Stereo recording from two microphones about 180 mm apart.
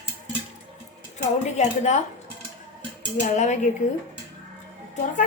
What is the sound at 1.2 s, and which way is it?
Speech, 40° left (ahead or behind).